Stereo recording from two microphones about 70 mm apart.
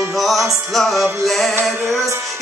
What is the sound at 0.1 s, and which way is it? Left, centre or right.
Music, centre.